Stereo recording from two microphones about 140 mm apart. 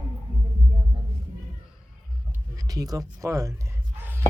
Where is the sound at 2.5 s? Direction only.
25° right (ahead or behind).